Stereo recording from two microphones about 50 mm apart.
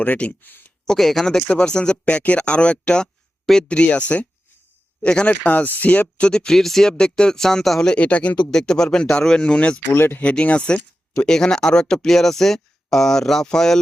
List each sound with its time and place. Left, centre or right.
0.2 s speech: left
0.9 s speech: centre
3.4 s speech: centre
3.7 s speech: left; by 6.9 s centre
6.9 s speech: centre
7.9 s speech: left
8.4 s speech: centre
9.9 s speech: left
10.2 s speech: left; by 13.7 s centre